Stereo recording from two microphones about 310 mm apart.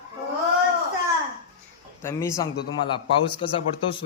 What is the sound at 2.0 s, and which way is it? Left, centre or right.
A man's voice, centre.